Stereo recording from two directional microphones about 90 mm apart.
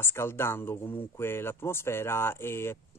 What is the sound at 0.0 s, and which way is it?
Speech, 25° left (ahead or behind).